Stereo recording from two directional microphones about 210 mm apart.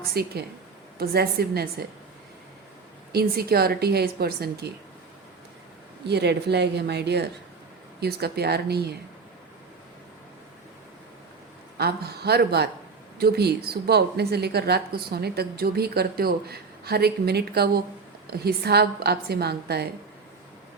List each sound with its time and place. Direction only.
0.1 s a woman's voice: 50° right (ahead or behind)
3.1 s a woman's voice: 50° right (ahead or behind)
6.1 s a woman's voice: 50° right (ahead or behind)
11.8 s a woman's voice: 50° right (ahead or behind)